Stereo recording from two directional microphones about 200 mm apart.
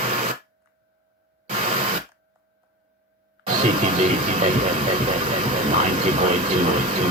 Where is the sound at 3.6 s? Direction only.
30° right (ahead or behind).